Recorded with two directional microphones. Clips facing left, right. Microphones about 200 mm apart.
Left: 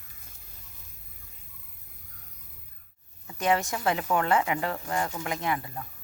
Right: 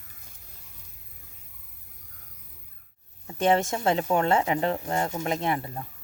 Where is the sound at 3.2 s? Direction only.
30° right (ahead or behind).